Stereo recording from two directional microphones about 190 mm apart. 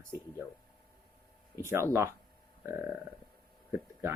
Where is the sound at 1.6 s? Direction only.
15° right (ahead or behind).